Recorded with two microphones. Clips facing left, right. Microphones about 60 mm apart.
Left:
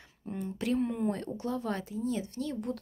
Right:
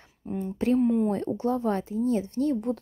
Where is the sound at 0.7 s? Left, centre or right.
Centre.